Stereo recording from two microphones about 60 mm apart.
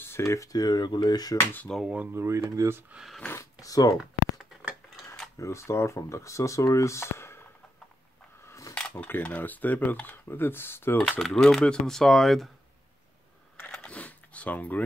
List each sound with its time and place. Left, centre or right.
0.2 s speech: left
1.4 s speech: left
2.1 s speech: right
3.3 s speech: left
4.0 s a sound: centre
5.4 s speech: left
8.5 s a sound: left
8.9 s speech: left
11.1 s speech: centre
13.8 s a sound: left